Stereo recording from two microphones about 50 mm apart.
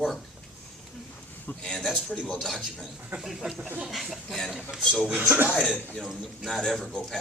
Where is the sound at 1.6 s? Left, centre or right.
Centre.